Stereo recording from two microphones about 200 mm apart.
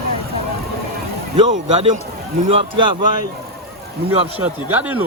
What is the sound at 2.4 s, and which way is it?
Speech, 25° right (ahead or behind).